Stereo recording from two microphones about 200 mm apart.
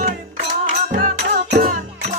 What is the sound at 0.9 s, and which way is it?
Music, 40° right (ahead or behind).